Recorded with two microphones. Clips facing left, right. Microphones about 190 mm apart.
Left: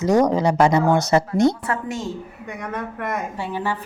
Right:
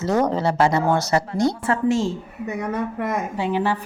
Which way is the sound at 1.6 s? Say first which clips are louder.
Right 6 dB; 30° right (ahead or behind).